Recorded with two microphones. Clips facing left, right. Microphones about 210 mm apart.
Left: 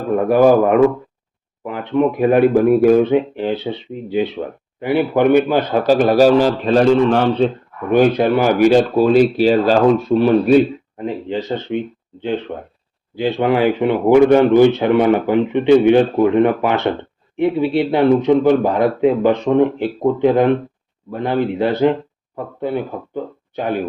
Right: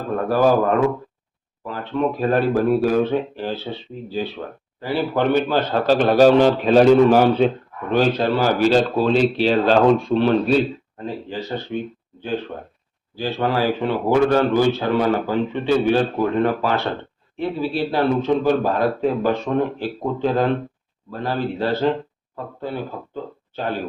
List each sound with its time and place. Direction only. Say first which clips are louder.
0.2 s speech: left 5 dB; 15° left (ahead or behind); by 7.5 s 5° right (ahead or behind)
7.9 s speech: left 5 dB; 15° left (ahead or behind)